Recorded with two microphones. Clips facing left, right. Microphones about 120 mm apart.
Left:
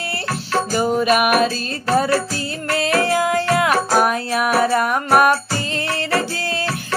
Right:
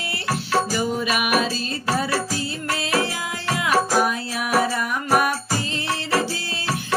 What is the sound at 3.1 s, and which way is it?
Music, 55° left (ahead or behind).